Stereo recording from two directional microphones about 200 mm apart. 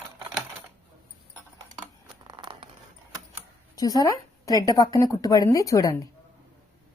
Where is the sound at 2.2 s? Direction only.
20° right (ahead or behind).